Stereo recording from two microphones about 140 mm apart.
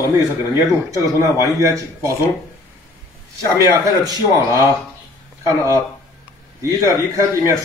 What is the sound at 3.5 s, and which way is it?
A man's voice, 25° right (ahead or behind).